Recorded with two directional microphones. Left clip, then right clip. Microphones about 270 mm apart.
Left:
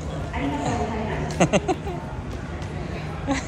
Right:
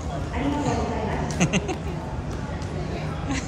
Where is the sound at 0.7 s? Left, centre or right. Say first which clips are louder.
Even; centre.